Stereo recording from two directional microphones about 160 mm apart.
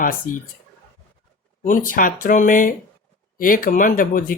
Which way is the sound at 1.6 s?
55° left (ahead or behind).